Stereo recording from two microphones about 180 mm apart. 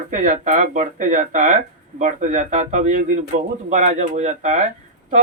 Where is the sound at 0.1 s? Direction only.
45° right (ahead or behind).